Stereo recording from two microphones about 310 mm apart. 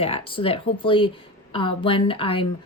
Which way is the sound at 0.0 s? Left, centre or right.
Centre.